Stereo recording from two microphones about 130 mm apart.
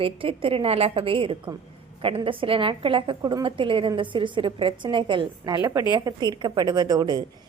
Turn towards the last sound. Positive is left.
turn(degrees=-30)  # may be behind; listen again after turning